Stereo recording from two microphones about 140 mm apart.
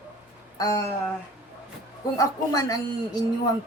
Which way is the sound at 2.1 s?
25° left (ahead or behind).